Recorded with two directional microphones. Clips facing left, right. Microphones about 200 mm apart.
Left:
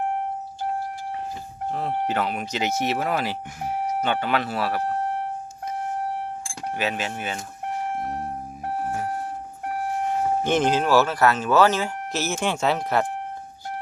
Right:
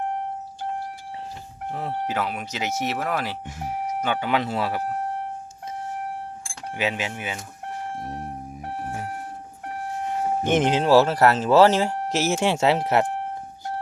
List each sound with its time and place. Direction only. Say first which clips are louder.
2.0 s speech: left 2 dB; 5° right (ahead or behind)
4.0 s speech: right 2 dB; 10° right (ahead or behind)
6.7 s speech: right 1 dB; 15° right (ahead or behind)
10.4 s speech: right 2 dB; 20° right (ahead or behind)
12.0 s speech: right 4 dB; 90° right
12.3 s speech: right 3 dB; 25° right (ahead or behind)